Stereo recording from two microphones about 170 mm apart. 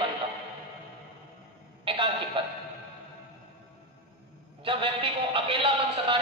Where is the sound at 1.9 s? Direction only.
30° right (ahead or behind).